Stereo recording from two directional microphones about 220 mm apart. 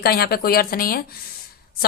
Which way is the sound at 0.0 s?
45° left (ahead or behind).